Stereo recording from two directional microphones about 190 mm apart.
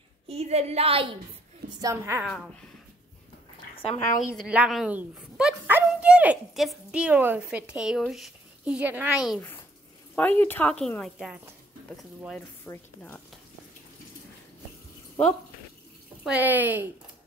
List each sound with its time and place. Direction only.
0.3 s a woman's voice: 35° right (ahead or behind)
1.8 s speech: 15° right (ahead or behind)
2.2 s a woman's voice: 5° left (ahead or behind)
3.7 s speech: 30° left (ahead or behind)
4.4 s a woman's voice: 5° right (ahead or behind)
10.1 s a woman's voice: 10° left (ahead or behind)
12.6 s speech: 10° left (ahead or behind)
16.3 s speech: 10° right (ahead or behind)